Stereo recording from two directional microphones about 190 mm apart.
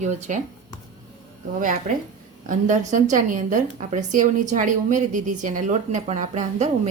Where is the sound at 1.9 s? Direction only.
40° right (ahead or behind).